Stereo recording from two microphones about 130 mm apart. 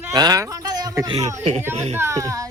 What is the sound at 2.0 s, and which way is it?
Speech, 20° right (ahead or behind).